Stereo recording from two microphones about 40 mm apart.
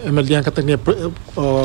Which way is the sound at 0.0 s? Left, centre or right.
Centre.